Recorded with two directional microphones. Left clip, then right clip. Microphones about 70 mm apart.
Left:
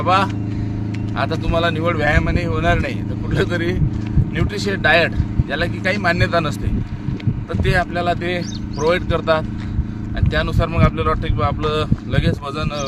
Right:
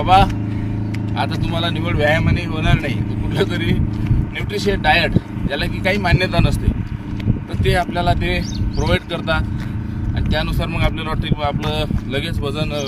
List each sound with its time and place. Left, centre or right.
0.0 s speech: left
2.2 s speech: left
3.3 s speech: left
7.6 s speech: left